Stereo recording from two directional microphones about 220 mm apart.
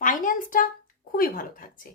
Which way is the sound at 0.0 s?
35° left (ahead or behind).